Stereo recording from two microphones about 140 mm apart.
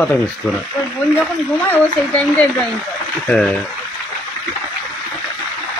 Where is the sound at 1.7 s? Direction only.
10° left (ahead or behind).